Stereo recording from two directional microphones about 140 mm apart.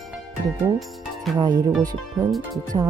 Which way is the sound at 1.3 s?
25° right (ahead or behind).